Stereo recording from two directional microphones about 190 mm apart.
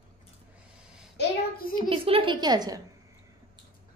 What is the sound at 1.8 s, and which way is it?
A woman's voice, 30° right (ahead or behind).